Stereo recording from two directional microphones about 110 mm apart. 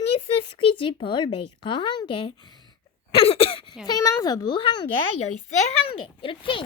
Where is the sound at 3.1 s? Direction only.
60° left (ahead or behind).